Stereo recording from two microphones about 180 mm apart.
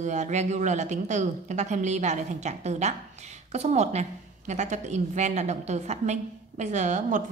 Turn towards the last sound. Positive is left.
turn(degrees=-40)  # may be behind; listen again after turning